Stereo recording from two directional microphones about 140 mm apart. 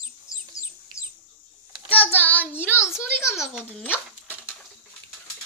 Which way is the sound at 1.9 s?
10° left (ahead or behind).